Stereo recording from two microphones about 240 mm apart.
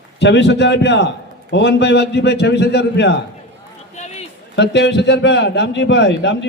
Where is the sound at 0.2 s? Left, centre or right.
Left.